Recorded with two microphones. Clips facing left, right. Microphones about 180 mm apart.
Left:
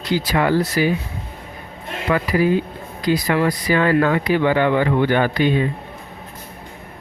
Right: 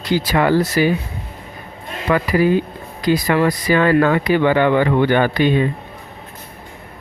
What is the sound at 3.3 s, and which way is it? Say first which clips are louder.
Speech: right 3 dB; 70° right (ahead or behind).